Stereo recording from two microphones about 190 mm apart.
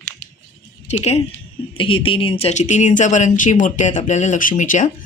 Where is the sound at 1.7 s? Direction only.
30° left (ahead or behind).